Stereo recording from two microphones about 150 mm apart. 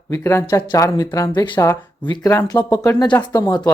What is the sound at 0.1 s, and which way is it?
Speech, 15° left (ahead or behind).